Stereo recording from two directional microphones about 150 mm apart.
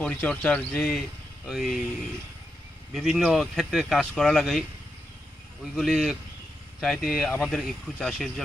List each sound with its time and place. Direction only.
0.0 s speech: 10° left (ahead or behind)
2.9 s speech: centre (ahead or behind)
5.7 s speech: centre (ahead or behind)